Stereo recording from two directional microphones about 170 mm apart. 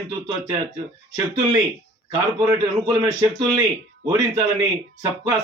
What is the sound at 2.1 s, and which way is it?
A man's voice, 20° right (ahead or behind).